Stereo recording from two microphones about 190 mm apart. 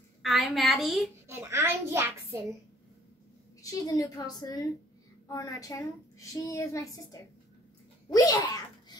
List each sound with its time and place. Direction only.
0.2 s a woman's voice: centre (ahead or behind)
1.2 s a child's voice: 15° right (ahead or behind)
3.6 s a woman's voice: 15° left (ahead or behind)